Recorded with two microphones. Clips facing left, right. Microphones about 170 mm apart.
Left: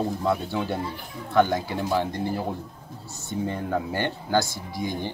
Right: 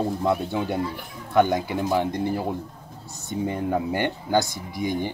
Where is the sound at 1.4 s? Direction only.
15° right (ahead or behind).